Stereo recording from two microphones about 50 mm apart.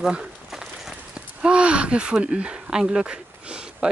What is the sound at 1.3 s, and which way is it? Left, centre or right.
Speech, right.